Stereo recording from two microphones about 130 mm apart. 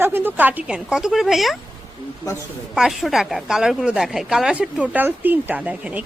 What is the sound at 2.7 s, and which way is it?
Speech, 5° right (ahead or behind).